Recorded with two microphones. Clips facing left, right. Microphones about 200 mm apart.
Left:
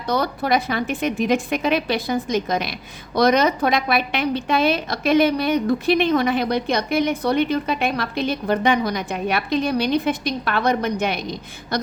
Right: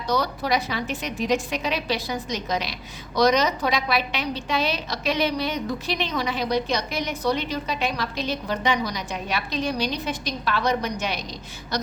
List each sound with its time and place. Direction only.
0.1 s a woman's voice: 55° left (ahead or behind)